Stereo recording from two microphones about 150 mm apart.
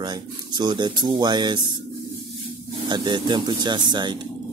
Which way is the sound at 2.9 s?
30° right (ahead or behind).